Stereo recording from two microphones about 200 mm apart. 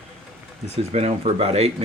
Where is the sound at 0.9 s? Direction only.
30° right (ahead or behind).